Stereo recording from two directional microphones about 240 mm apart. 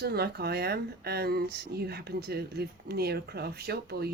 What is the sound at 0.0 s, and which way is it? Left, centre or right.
Speech, right.